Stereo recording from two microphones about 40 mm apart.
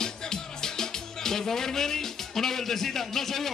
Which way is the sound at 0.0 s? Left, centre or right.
Centre.